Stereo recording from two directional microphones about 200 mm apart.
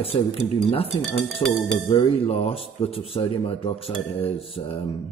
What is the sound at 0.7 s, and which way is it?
Speech, 30° left (ahead or behind).